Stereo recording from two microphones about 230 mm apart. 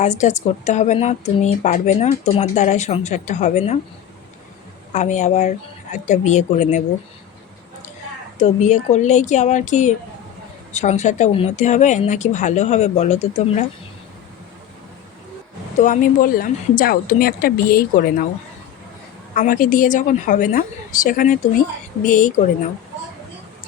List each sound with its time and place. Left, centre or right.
0.0 s speech: left
4.9 s speech: left
8.4 s speech: left
15.8 s speech: left
19.4 s speech: left